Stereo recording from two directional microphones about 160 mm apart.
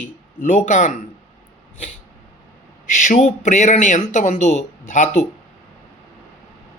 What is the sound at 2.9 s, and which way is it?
Speech, 50° left (ahead or behind).